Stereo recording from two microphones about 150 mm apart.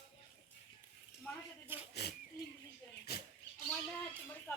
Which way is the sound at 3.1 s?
90° left.